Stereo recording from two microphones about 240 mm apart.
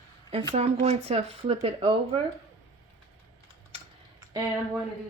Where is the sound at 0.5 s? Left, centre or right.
Right.